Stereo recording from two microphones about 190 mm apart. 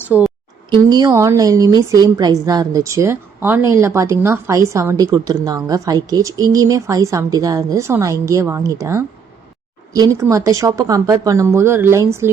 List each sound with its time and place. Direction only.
0.1 s a woman's voice: 5° right (ahead or behind)
0.7 s a woman's voice: 20° right (ahead or behind)